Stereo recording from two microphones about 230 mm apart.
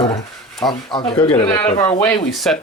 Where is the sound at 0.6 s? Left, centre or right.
Centre.